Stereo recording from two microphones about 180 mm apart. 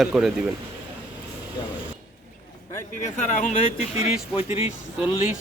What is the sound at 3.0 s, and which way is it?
Speech, 45° left (ahead or behind).